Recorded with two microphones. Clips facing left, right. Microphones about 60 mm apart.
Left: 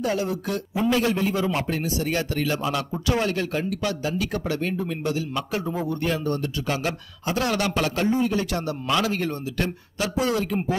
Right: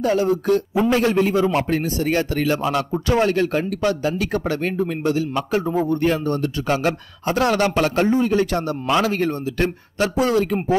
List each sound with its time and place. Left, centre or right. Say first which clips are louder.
0.2 s a man's voice: right 9 dB; right
5.3 s a man's voice: right 6 dB; right